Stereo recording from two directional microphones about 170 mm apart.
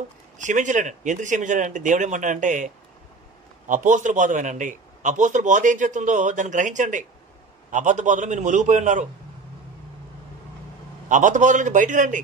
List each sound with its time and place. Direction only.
0.4 s a man's voice: 45° right (ahead or behind)
11.1 s a man's voice: 50° right (ahead or behind)